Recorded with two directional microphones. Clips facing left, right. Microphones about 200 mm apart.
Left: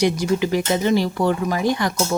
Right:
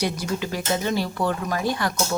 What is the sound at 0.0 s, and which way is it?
Speech, 15° left (ahead or behind).